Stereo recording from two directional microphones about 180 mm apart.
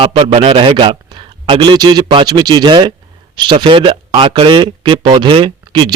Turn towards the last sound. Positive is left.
turn(degrees=-25)  # may be behind; listen again after turning